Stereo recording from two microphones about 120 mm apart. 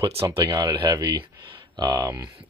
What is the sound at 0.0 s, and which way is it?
Speech, 55° right (ahead or behind).